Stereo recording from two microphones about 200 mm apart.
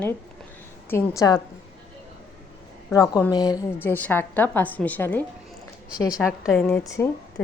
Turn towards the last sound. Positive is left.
turn(degrees=10)  # may be behind; listen again after turning